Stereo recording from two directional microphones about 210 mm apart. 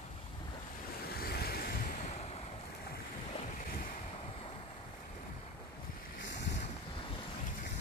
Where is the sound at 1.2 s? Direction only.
45° left (ahead or behind).